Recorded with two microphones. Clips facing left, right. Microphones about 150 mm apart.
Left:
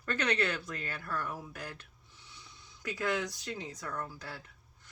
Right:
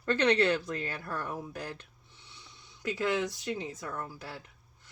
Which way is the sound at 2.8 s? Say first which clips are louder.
Right 3 dB; 25° right (ahead or behind).